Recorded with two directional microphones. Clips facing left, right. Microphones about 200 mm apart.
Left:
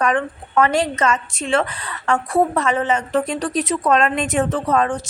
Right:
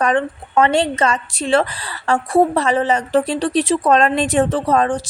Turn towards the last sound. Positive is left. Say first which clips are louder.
# right 2 dB
turn(degrees=-35)  # may be behind; listen again after turning